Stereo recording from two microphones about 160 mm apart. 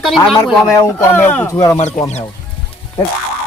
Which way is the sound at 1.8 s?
45° left (ahead or behind).